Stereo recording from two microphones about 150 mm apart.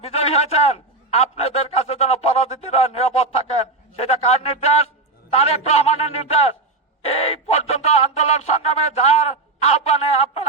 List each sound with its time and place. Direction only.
0.0 s a man's voice: 45° left (ahead or behind)